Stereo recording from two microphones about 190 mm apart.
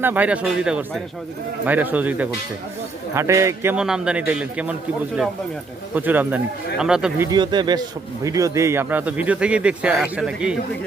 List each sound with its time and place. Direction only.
0.0 s speech: 10° right (ahead or behind)
5.9 s speech: 10° right (ahead or behind)
7.3 s speech: 25° right (ahead or behind); by 10.6 s 5° right (ahead or behind)